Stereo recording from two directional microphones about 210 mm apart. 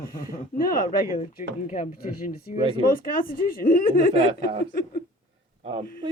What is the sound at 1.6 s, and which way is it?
Speech, 40° left (ahead or behind).